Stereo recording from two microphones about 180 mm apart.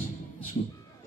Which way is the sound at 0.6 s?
55° left (ahead or behind).